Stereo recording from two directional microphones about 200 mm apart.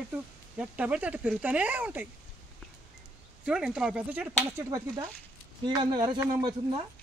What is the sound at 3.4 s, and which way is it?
Speech, 5° right (ahead or behind).